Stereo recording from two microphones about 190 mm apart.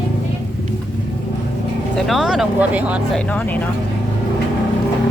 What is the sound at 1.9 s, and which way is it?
Speech, centre (ahead or behind).